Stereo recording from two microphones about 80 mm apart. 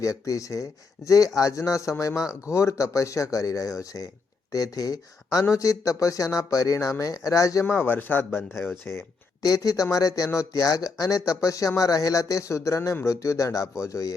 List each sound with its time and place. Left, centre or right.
0.0 s a man's voice: left
7.6 s a man's voice: left
9.4 s speech: left